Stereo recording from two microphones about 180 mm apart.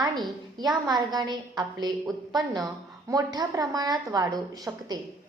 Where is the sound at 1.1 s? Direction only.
20° right (ahead or behind).